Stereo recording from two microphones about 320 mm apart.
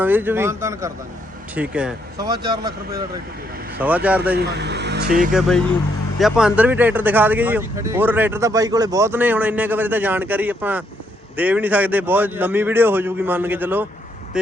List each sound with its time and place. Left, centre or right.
0.0 s a man's voice: centre
4.4 s speech: right
5.3 s a man's voice: centre